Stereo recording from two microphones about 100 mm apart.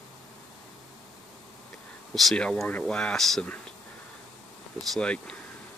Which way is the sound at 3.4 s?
15° left (ahead or behind).